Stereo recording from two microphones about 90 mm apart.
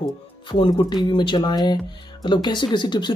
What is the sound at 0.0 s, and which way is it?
Speech, 70° left (ahead or behind).